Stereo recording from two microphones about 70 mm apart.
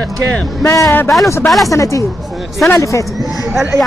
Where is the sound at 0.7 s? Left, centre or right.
Left.